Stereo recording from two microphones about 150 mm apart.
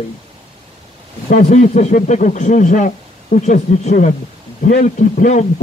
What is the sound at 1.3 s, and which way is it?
A man's voice, 50° left (ahead or behind).